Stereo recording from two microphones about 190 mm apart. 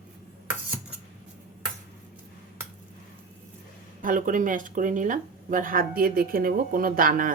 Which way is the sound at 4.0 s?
45° right (ahead or behind).